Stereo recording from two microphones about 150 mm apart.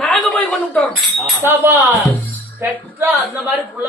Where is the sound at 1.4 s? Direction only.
15° right (ahead or behind).